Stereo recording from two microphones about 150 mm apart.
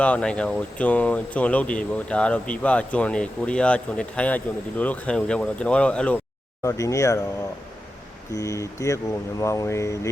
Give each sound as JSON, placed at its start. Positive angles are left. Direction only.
{"t": 0.0, "sound": "speech", "side_deg": 5}
{"t": 6.6, "sound": "speech", "side_deg": 20}
{"t": 8.3, "sound": "speech", "side_deg": 20}